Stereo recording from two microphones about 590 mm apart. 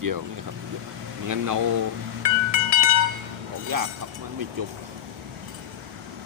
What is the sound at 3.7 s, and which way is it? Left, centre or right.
Speech, right.